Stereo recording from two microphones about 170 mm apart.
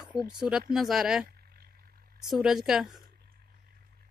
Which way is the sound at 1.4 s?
65° right (ahead or behind).